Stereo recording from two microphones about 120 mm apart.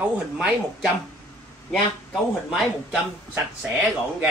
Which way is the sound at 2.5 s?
5° right (ahead or behind).